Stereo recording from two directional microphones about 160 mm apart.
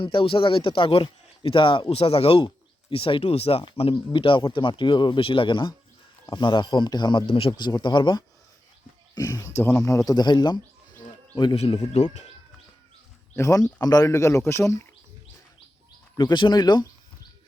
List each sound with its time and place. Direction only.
0.0 s a man's voice: 35° left (ahead or behind)
13.3 s a man's voice: 20° left (ahead or behind)
16.1 s a man's voice: 30° left (ahead or behind)